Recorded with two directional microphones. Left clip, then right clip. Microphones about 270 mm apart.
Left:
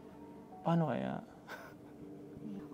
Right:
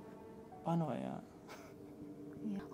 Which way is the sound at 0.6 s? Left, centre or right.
Left.